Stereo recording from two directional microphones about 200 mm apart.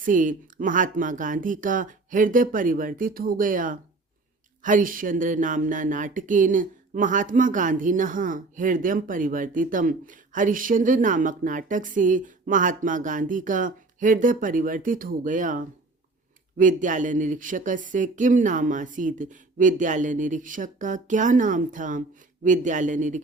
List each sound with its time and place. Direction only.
0.0 s speech: 40° right (ahead or behind)